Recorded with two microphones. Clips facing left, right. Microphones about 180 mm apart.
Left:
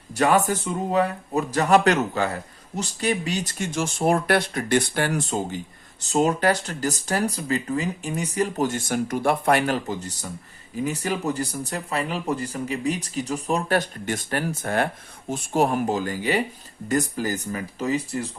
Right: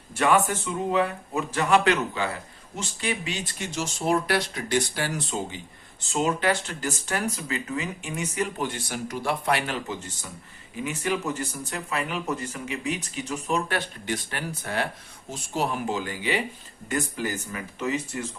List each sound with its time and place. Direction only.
0.1 s speech: 40° left (ahead or behind); by 5.2 s 55° left (ahead or behind)
6.0 s speech: 40° left (ahead or behind)